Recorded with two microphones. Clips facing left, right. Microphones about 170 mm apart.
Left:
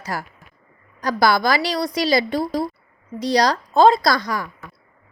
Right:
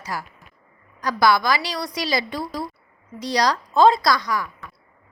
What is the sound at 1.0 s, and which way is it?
A woman's voice, 30° left (ahead or behind).